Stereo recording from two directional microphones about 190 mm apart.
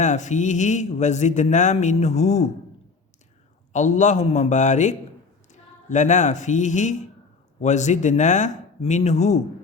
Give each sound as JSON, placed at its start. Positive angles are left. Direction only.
{"t": 0.0, "sound": "a man's voice", "side_deg": 40}
{"t": 3.7, "sound": "a man's voice", "side_deg": 40}